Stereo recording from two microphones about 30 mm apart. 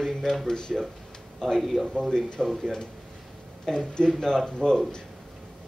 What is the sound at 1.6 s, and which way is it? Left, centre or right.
Speech, centre.